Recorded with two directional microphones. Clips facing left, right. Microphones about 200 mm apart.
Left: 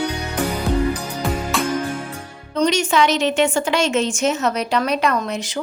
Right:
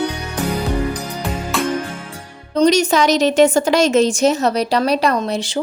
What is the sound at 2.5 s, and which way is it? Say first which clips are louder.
A woman's voice: right 5 dB; 40° right (ahead or behind).